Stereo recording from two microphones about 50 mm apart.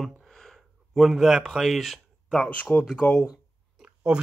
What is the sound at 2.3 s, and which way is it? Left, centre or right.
Speech, left.